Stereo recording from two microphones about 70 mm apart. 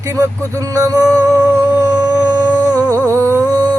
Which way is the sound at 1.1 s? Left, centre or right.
Right.